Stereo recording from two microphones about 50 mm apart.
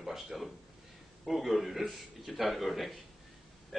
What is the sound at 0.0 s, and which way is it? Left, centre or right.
A man's voice, centre.